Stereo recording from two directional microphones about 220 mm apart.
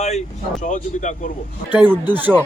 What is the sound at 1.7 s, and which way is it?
Speech, 10° right (ahead or behind).